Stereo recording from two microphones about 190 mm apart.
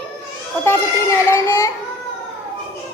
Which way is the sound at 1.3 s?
10° left (ahead or behind).